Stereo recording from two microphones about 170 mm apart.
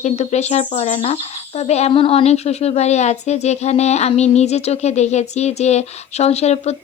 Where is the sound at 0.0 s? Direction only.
40° left (ahead or behind).